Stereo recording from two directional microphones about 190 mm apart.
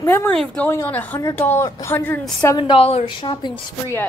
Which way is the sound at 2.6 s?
30° left (ahead or behind).